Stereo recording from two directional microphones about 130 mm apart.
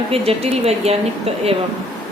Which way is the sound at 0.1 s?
50° right (ahead or behind).